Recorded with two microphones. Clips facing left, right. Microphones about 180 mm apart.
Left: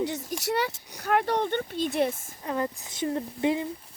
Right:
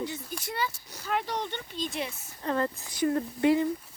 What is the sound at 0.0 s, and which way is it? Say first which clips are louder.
Speech: left 6 dB; 75° left (ahead or behind).